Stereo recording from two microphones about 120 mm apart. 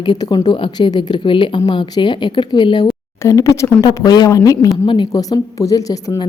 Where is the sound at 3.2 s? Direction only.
25° left (ahead or behind).